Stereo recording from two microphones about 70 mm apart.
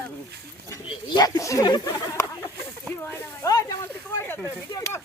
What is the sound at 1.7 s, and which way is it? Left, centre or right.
Speech, left.